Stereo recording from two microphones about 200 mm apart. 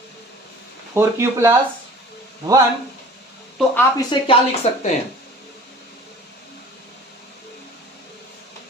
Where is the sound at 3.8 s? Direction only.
20° left (ahead or behind).